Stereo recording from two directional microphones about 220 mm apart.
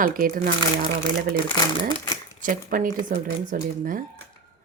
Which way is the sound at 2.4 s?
40° right (ahead or behind).